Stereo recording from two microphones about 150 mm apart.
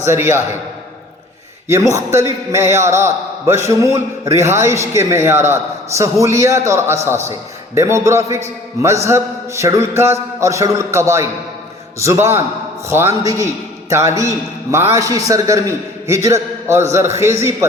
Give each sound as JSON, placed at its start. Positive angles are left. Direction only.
{"t": 0.0, "sound": "a man's voice", "side_deg": -15}
{"t": 1.6, "sound": "a man's voice", "side_deg": -20}